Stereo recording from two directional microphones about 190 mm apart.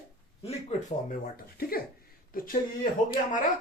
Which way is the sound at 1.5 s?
50° left (ahead or behind).